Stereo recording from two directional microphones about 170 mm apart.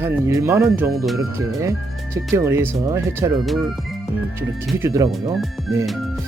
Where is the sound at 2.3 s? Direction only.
15° right (ahead or behind).